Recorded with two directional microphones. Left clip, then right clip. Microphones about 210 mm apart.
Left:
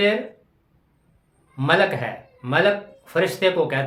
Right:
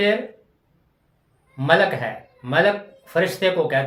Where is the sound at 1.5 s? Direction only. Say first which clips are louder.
Right 1 dB; 15° left (ahead or behind).